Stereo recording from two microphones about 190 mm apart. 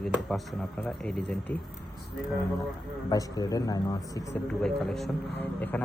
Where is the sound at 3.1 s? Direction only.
20° left (ahead or behind).